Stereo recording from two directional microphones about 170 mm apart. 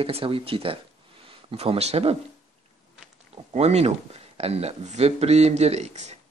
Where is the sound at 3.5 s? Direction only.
40° right (ahead or behind).